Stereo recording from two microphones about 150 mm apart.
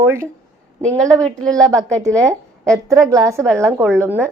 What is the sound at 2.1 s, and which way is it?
A woman's voice, 20° right (ahead or behind).